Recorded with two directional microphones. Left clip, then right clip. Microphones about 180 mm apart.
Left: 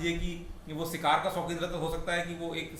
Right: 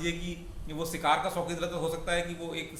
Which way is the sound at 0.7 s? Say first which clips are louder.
Even; 20° right (ahead or behind).